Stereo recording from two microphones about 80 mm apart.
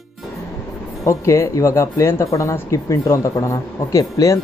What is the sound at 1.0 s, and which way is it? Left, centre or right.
Speech, left.